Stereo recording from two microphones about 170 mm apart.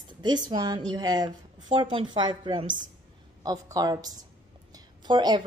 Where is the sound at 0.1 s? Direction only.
25° right (ahead or behind).